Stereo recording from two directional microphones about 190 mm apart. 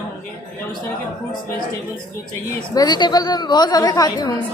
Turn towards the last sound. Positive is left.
turn(degrees=20)  # may be behind; listen again after turning